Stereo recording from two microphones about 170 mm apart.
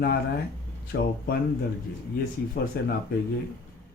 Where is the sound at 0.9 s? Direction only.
70° left (ahead or behind).